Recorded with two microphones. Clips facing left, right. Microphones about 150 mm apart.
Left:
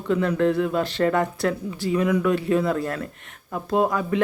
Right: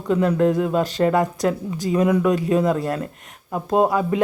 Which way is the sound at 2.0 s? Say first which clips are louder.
Right 3 dB; 15° right (ahead or behind).